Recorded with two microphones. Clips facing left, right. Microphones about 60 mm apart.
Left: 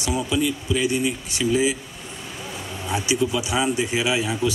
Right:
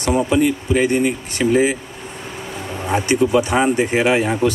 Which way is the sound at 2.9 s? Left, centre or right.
Right.